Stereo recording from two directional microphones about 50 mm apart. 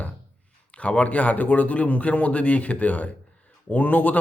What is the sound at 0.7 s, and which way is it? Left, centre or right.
A man's voice, left.